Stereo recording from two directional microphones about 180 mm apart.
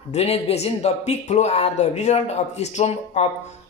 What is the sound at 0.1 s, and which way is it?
Speech, 35° left (ahead or behind).